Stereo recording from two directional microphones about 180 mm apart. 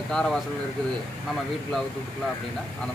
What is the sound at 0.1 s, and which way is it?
Speech, 5° left (ahead or behind).